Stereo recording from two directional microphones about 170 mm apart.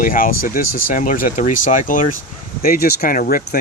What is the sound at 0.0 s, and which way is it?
Speech, 55° left (ahead or behind).